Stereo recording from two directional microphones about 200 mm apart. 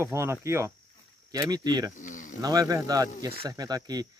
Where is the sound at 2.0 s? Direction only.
40° left (ahead or behind).